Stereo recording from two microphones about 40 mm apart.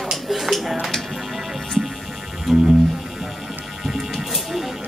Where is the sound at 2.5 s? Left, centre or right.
Centre.